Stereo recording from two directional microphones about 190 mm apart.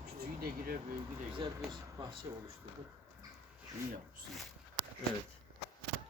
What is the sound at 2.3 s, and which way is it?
Speech, 15° right (ahead or behind).